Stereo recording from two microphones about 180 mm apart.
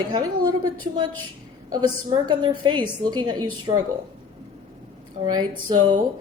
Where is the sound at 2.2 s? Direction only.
25° right (ahead or behind).